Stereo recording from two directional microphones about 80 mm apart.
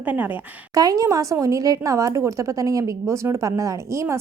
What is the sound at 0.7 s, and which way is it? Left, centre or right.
Speech, right.